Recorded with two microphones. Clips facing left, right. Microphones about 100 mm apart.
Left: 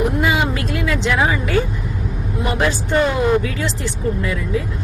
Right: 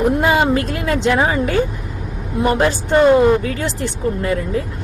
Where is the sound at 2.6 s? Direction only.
40° right (ahead or behind).